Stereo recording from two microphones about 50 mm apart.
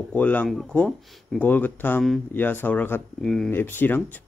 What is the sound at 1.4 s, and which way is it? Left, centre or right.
Speech, left.